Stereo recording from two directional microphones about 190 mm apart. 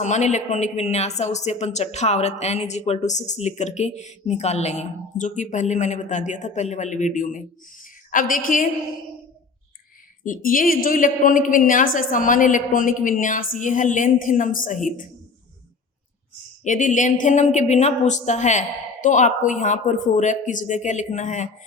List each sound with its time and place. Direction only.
0.0 s speech: 40° left (ahead or behind)
10.2 s a woman's voice: 45° left (ahead or behind)
16.6 s speech: 40° left (ahead or behind)